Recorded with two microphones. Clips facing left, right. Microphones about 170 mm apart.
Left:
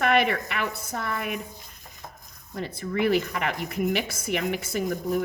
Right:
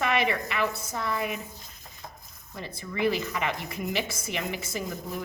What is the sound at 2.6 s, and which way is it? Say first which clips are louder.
Speech: left 3 dB; 55° left (ahead or behind).